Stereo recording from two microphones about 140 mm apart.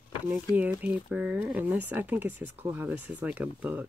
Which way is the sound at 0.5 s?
10° right (ahead or behind).